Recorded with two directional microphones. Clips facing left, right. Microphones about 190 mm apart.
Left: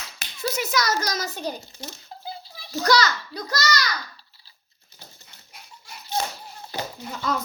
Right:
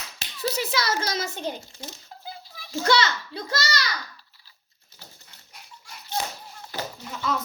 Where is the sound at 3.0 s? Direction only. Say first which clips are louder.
Left 1 dB; 25° right (ahead or behind).